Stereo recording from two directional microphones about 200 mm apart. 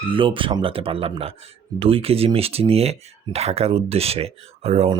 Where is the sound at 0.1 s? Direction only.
25° right (ahead or behind).